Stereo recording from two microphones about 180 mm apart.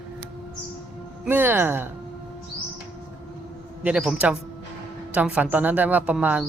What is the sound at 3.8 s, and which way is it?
A man's voice, 5° right (ahead or behind).